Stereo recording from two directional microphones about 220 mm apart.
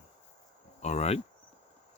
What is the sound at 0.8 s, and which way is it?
Cricket, 30° left (ahead or behind).